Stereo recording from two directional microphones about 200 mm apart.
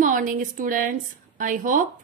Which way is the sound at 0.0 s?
40° right (ahead or behind).